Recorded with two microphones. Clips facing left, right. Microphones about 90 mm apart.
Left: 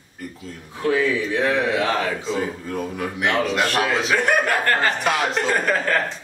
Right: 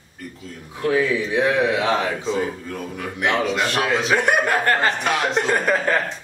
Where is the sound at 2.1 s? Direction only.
Centre (ahead or behind).